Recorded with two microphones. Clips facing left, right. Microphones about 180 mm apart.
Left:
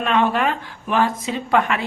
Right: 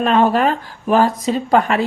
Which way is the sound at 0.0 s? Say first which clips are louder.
Right 5 dB; 40° right (ahead or behind).